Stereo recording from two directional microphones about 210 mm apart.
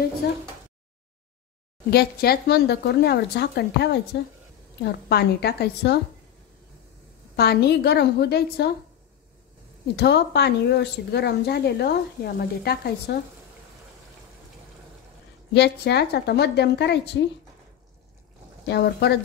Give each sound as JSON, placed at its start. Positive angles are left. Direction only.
{"t": 0.2, "sound": "speech", "side_deg": 50}
{"t": 1.9, "sound": "speech", "side_deg": 50}
{"t": 7.3, "sound": "speech", "side_deg": 50}
{"t": 9.9, "sound": "speech", "side_deg": 50}
{"t": 15.5, "sound": "speech", "side_deg": 55}
{"t": 18.7, "sound": "speech", "side_deg": 50}